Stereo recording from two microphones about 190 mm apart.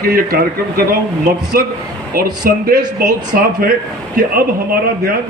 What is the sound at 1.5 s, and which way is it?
A man's voice, 50° right (ahead or behind).